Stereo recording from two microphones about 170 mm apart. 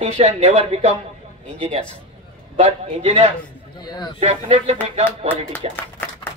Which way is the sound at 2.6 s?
40° right (ahead or behind).